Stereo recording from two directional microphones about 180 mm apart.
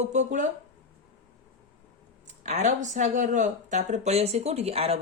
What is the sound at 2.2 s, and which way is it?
Speech, 40° right (ahead or behind).